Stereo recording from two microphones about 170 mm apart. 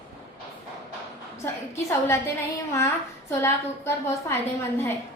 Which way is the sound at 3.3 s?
15° left (ahead or behind).